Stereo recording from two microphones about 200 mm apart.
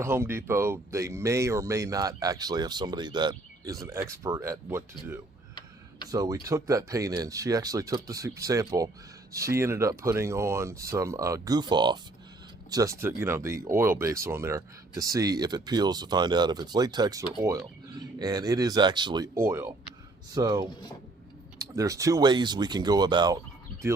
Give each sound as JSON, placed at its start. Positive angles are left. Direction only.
{"t": 0.0, "sound": "speech", "side_deg": -10}